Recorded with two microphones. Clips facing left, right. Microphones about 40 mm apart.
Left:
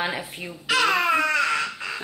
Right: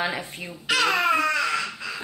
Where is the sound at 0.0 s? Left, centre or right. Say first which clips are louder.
Even; centre.